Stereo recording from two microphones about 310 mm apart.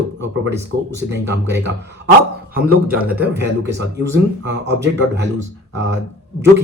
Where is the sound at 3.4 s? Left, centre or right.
Right.